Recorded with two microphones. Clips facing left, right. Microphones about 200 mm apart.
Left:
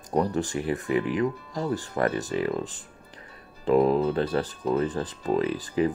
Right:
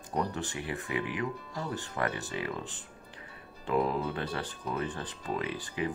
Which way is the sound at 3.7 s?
35° left (ahead or behind).